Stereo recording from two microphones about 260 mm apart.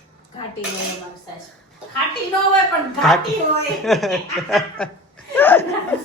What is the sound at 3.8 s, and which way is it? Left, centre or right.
Speech, centre.